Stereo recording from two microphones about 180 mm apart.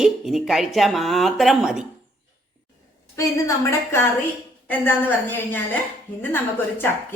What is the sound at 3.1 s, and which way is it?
Speech, 15° left (ahead or behind).